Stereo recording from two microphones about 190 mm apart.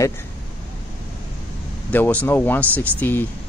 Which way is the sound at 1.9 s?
10° left (ahead or behind).